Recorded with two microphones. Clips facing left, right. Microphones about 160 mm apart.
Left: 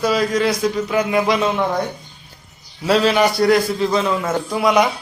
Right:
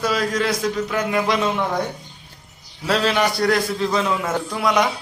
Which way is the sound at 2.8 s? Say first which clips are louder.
Left 4 dB; 5° left (ahead or behind).